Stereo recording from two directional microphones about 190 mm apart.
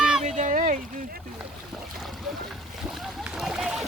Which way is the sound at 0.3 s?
40° right (ahead or behind).